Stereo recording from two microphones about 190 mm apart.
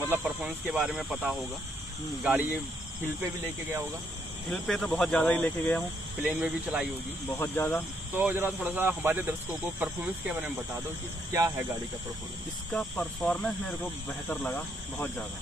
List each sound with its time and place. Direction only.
0.1 s speech: 5° right (ahead or behind)
4.5 s speech: 5° left (ahead or behind)
6.2 s speech: 5° right (ahead or behind)
7.3 s speech: 10° left (ahead or behind)
8.2 s speech: 10° right (ahead or behind)
12.7 s speech: 5° left (ahead or behind)